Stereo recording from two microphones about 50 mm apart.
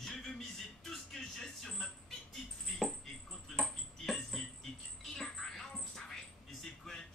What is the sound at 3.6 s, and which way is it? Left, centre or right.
Music, centre.